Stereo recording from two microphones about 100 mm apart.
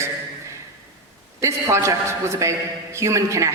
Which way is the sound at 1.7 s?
30° right (ahead or behind).